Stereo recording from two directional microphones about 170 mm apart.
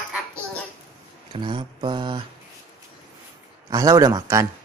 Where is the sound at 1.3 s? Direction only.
30° right (ahead or behind).